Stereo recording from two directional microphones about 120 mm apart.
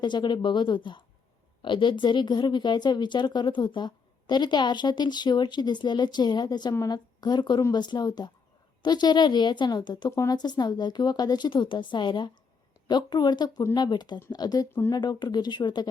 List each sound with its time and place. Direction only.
0.0 s speech: 40° left (ahead or behind)
10.1 s speech: 25° left (ahead or behind)
10.3 s speech: 35° left (ahead or behind)